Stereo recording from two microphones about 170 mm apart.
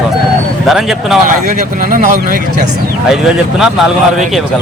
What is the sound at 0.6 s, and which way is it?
Speech, centre (ahead or behind).